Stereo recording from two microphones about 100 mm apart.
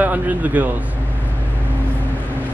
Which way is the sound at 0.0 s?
20° right (ahead or behind).